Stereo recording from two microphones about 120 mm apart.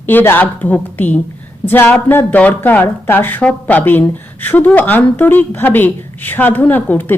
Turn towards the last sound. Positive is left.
turn(degrees=15)  # may be behind; listen again after turning